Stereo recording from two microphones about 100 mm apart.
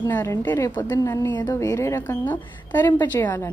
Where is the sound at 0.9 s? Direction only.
35° left (ahead or behind).